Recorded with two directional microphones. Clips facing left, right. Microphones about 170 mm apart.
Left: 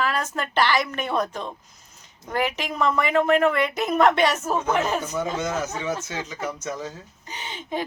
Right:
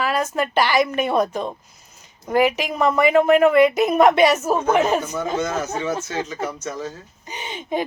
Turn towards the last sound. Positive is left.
turn(degrees=-15)  # may be behind; listen again after turning